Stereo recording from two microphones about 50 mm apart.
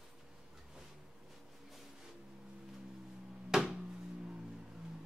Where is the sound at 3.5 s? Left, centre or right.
Centre.